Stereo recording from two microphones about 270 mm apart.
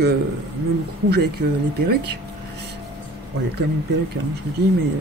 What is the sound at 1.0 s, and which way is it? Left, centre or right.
Speech, right.